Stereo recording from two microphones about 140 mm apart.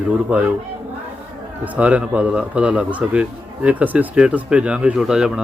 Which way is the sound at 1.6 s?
10° right (ahead or behind).